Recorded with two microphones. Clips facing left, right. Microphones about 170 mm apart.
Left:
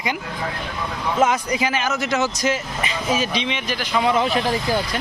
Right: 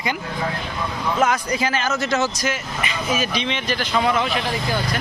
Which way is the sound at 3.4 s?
10° left (ahead or behind).